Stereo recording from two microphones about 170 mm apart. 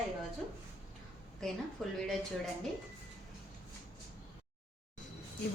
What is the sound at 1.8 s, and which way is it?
Speech, centre (ahead or behind).